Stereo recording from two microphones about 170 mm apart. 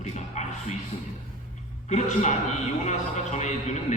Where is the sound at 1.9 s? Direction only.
45° left (ahead or behind).